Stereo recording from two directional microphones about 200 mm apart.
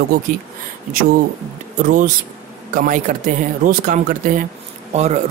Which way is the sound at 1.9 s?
40° right (ahead or behind).